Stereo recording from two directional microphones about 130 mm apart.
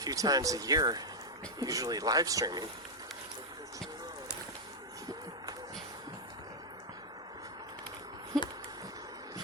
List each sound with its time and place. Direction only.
0.0 s speech: 30° right (ahead or behind)